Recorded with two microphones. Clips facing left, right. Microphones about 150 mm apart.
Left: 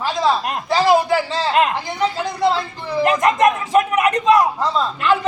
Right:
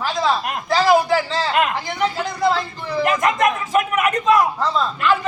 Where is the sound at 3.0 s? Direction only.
35° left (ahead or behind).